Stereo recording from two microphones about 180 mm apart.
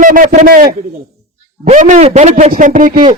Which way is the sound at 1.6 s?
45° right (ahead or behind).